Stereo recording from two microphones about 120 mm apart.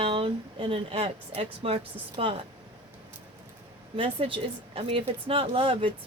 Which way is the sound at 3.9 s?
50° right (ahead or behind).